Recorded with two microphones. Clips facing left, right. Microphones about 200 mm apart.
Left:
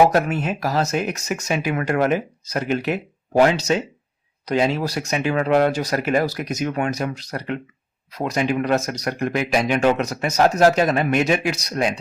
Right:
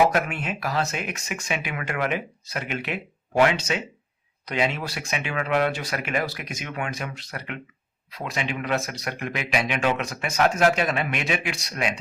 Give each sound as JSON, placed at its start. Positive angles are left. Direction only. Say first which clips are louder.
{"t": 0.1, "sound": "speech", "louder": "left 6 dB", "side_deg": 40}